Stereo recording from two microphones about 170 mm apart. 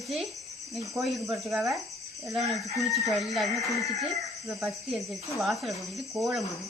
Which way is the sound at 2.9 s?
Centre (ahead or behind).